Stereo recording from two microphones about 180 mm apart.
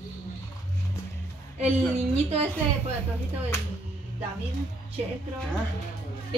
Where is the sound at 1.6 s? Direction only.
35° right (ahead or behind).